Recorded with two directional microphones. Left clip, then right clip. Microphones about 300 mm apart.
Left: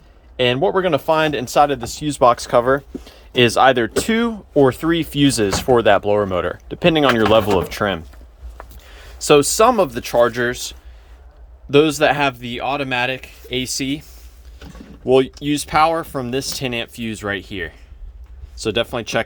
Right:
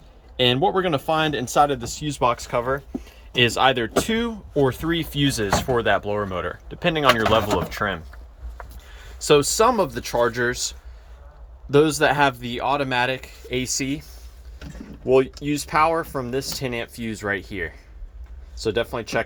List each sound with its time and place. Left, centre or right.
0.3 s speech: centre
11.7 s speech: centre